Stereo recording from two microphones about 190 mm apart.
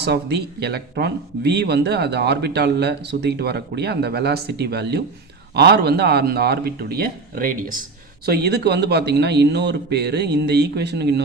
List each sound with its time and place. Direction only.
0.0 s speech: 60° right (ahead or behind)
8.3 s speech: 60° right (ahead or behind)